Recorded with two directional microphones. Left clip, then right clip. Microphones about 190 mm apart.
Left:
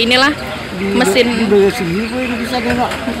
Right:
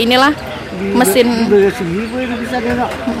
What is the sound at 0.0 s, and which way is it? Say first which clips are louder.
A woman's voice: right 1 dB; 20° right (ahead or behind).